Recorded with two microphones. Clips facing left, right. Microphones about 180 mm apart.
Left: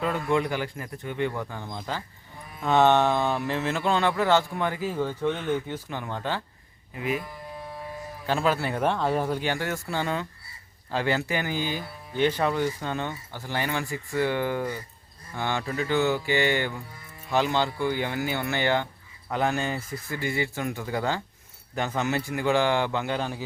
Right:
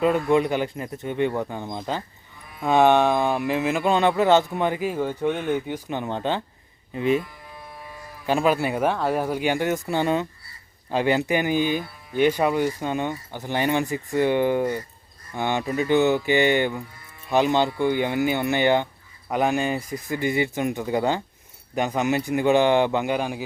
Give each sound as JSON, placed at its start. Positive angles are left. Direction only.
{"t": 0.0, "sound": "speech", "side_deg": -20}
{"t": 8.3, "sound": "speech", "side_deg": -15}